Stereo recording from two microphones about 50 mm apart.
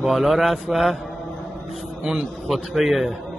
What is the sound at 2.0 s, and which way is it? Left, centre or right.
Speech, centre.